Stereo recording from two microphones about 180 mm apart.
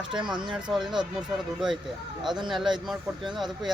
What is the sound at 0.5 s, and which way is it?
Speech, 5° right (ahead or behind).